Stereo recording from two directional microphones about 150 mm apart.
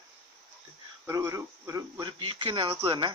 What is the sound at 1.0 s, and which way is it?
Speech, 20° right (ahead or behind).